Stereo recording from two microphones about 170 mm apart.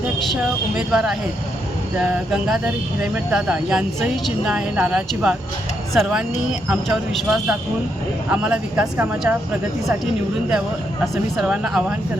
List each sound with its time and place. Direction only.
0.8 s a woman's voice: 5° right (ahead or behind)
11.0 s a woman's voice: centre (ahead or behind)